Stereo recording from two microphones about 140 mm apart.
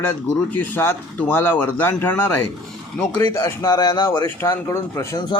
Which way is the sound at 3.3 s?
25° left (ahead or behind).